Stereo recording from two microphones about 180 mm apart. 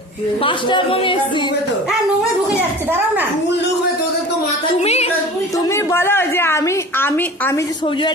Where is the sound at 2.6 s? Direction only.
10° right (ahead or behind).